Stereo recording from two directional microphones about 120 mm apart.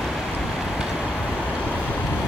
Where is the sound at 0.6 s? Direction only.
5° right (ahead or behind).